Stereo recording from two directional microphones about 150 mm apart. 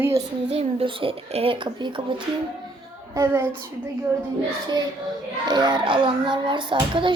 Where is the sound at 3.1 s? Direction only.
15° right (ahead or behind).